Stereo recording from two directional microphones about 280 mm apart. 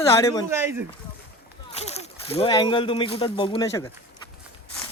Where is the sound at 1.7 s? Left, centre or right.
Left.